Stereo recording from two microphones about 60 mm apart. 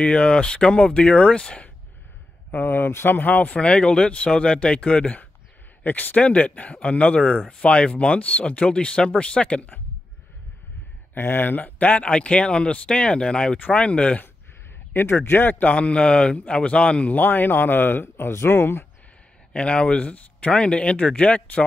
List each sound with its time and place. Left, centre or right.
0.0 s speech: left
2.5 s speech: left
11.1 s speech: left; by 14.2 s centre
15.0 s speech: left
15.7 s speech: centre; by 18.9 s left
19.5 s speech: centre